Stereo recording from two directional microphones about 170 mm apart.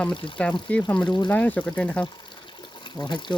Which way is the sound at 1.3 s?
10° left (ahead or behind).